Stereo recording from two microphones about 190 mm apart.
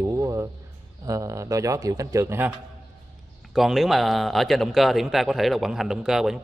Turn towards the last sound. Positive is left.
turn(degrees=0)  # may be behind; listen again after turning